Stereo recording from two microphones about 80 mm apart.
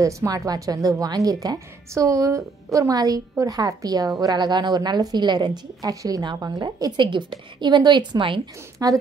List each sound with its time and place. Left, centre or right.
0.0 s a woman's voice: right
4.4 s speech: right
5.8 s a woman's voice: right
7.0 s a woman's voice: right
8.8 s a woman's voice: right